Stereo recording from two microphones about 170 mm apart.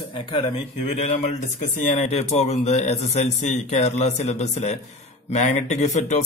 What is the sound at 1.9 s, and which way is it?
A man's voice, 40° left (ahead or behind).